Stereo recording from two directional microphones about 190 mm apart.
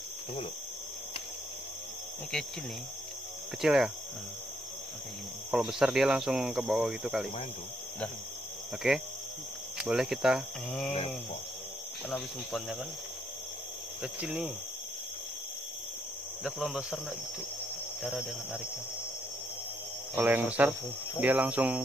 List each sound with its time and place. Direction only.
3.6 s speech: centre (ahead or behind)
5.5 s speech: 5° right (ahead or behind)
8.8 s speech: centre (ahead or behind)
12.1 s speech: centre (ahead or behind)
14.0 s speech: 5° right (ahead or behind)
16.4 s speech: centre (ahead or behind)
18.0 s speech: centre (ahead or behind)
20.2 s speech: 10° right (ahead or behind)